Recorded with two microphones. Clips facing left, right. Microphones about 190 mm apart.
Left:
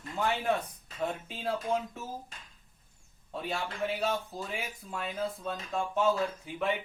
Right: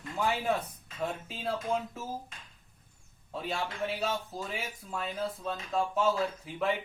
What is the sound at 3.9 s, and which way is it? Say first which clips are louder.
Speech: left 1 dB; 5° right (ahead or behind).